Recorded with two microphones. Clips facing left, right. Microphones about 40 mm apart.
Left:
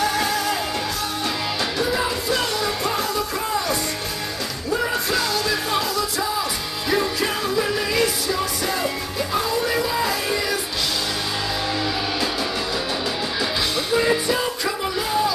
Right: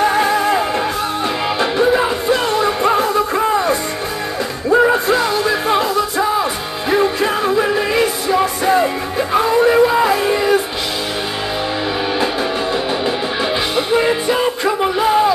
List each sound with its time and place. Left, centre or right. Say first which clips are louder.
0.0 s music: right 7 dB; right
13.0 s music: right 6 dB; right